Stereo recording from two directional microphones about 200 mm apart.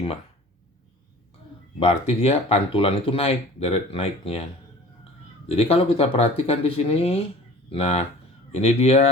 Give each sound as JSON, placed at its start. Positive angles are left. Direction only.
{"t": 1.8, "sound": "speech", "side_deg": 30}
{"t": 5.5, "sound": "speech", "side_deg": 30}